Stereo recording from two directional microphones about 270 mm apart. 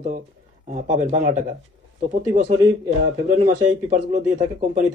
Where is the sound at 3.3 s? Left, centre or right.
Right.